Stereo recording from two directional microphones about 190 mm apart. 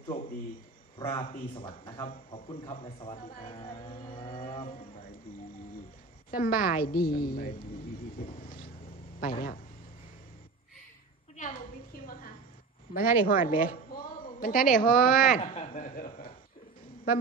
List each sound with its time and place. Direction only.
0.9 s a man's voice: 25° left (ahead or behind)
6.3 s a woman's voice: 50° left (ahead or behind)
8.4 s vehicle: 50° left (ahead or behind)
9.2 s a woman's voice: 50° left (ahead or behind)
11.3 s a sound: 45° left (ahead or behind)
12.9 s a woman's voice: 50° left (ahead or behind)
15.4 s speech: 35° left (ahead or behind)